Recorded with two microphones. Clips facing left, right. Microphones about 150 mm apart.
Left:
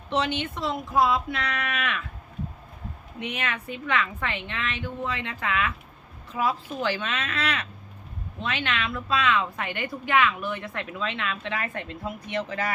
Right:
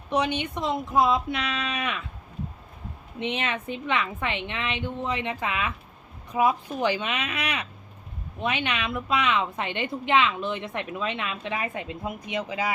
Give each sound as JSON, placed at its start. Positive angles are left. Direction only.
{"t": 0.1, "sound": "a woman's voice", "side_deg": -15}
{"t": 3.2, "sound": "a woman's voice", "side_deg": -25}